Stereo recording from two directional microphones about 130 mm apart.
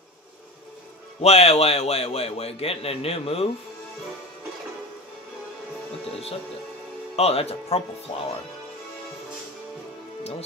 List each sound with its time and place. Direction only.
1.2 s a man's voice: 55° left (ahead or behind)
7.2 s a man's voice: 50° left (ahead or behind)